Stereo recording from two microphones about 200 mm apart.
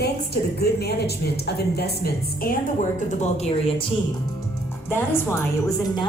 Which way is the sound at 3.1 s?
35° left (ahead or behind).